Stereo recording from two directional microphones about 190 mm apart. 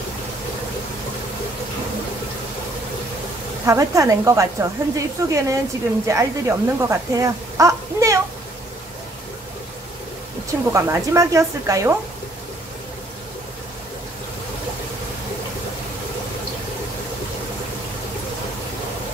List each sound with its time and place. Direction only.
3.6 s speech: 15° right (ahead or behind)
10.7 s speech: 15° right (ahead or behind)